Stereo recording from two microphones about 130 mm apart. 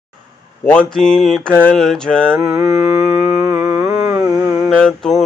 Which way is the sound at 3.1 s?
10° right (ahead or behind).